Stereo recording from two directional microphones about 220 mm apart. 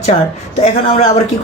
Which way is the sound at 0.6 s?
30° left (ahead or behind).